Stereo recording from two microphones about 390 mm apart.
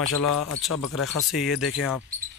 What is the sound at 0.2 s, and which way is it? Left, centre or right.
Speech, left.